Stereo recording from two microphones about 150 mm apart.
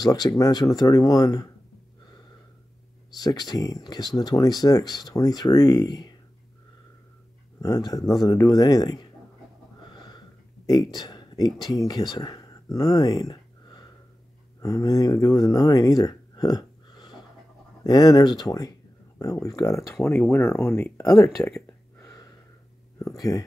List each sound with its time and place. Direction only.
0.0 s speech: 25° left (ahead or behind)
3.2 s speech: 25° left (ahead or behind)
7.6 s speech: 25° left (ahead or behind)
9.8 s snort: 30° left (ahead or behind)
10.7 s speech: 25° left (ahead or behind); by 21.5 s 5° left (ahead or behind)
21.5 s a sound: 15° left (ahead or behind)
22.9 s speech: 20° left (ahead or behind)